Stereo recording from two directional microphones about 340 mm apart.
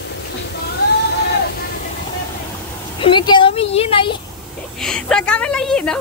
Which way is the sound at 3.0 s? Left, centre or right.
Centre.